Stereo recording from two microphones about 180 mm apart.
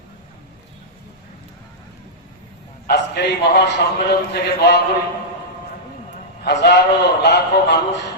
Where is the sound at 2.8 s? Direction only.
65° left (ahead or behind).